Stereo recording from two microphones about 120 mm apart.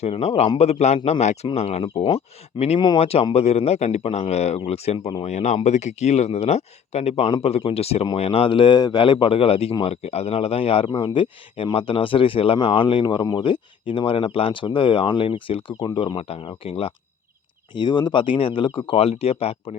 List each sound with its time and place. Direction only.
0.0 s a man's voice: 60° left (ahead or behind)
5.2 s a man's voice: 70° left (ahead or behind); by 16.9 s 50° left (ahead or behind)
17.7 s speech: 35° left (ahead or behind)
18.9 s a man's voice: 55° left (ahead or behind)